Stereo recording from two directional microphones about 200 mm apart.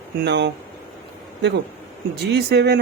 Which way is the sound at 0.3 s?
60° right (ahead or behind).